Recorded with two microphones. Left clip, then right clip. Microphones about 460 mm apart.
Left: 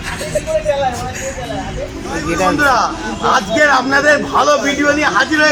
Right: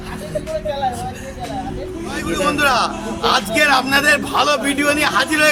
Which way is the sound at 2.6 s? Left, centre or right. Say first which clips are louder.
Left 3 dB; right.